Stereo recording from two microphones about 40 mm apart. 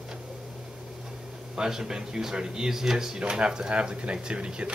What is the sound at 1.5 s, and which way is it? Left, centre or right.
Speech, centre.